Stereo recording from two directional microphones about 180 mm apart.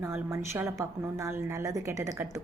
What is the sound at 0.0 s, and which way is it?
A woman's voice, 15° right (ahead or behind).